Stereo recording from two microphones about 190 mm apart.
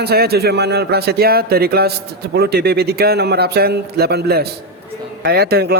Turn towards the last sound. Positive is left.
turn(degrees=-55)  # may be behind; listen again after turning